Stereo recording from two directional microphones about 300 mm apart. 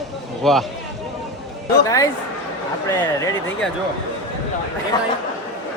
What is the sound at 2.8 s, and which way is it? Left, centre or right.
Speech, centre.